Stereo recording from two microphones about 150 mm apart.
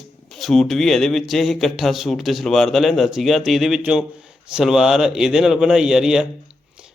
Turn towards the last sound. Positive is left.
turn(degrees=-5)  # may be behind; listen again after turning